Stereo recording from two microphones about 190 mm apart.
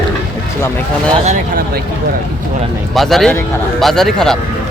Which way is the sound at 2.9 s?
Centre (ahead or behind).